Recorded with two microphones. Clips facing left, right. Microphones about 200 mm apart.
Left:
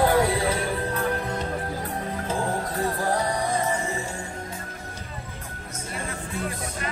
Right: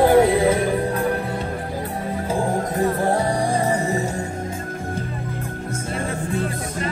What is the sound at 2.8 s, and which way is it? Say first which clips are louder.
Music: right 6 dB; 25° right (ahead or behind).